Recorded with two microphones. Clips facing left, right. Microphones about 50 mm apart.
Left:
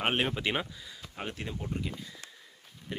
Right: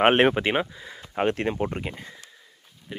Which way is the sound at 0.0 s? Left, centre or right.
Right.